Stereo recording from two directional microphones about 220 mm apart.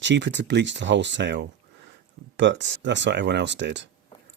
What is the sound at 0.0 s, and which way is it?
Speech, 55° right (ahead or behind).